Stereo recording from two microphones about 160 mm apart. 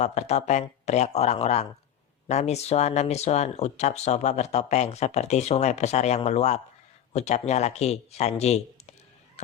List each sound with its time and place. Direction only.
0.0 s speech: 45° left (ahead or behind)